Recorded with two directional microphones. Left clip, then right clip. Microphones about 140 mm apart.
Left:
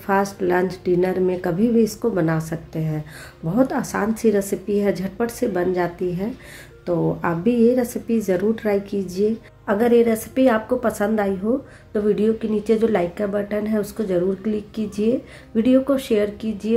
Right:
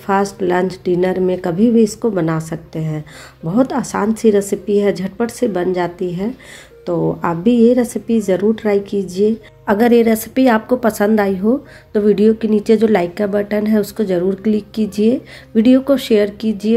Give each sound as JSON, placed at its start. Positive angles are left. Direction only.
{"t": 0.0, "sound": "a woman's voice", "side_deg": -20}
{"t": 9.7, "sound": "a woman's voice", "side_deg": -45}